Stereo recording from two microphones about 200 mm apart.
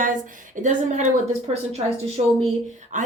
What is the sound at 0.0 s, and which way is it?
A woman's voice, 40° right (ahead or behind).